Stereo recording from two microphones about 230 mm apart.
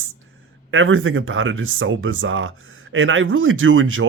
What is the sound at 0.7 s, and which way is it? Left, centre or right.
Speech, right.